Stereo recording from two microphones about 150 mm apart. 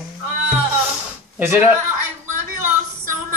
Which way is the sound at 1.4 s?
15° right (ahead or behind).